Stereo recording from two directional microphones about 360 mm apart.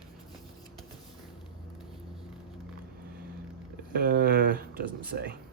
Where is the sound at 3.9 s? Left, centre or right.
Right.